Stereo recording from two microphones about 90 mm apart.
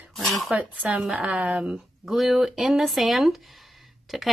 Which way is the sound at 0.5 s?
15° right (ahead or behind).